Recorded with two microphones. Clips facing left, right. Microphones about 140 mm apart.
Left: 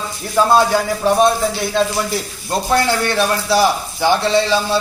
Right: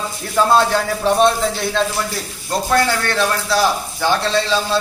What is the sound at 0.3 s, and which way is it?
Speech, 5° left (ahead or behind).